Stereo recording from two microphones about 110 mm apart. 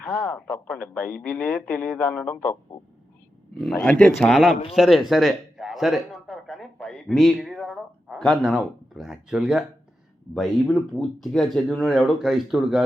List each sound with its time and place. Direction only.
0.0 s speech: centre (ahead or behind)
0.4 s speech: 15° left (ahead or behind)
3.6 s speech: 5° left (ahead or behind)